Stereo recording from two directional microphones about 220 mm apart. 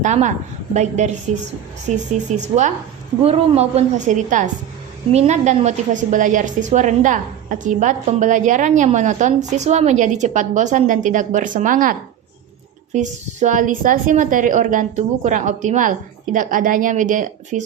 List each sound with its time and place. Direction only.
0.0 s a woman's voice: 35° right (ahead or behind)